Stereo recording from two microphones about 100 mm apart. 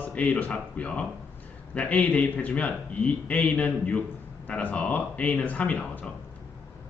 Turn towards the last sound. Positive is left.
turn(degrees=15)  # may be behind; listen again after turning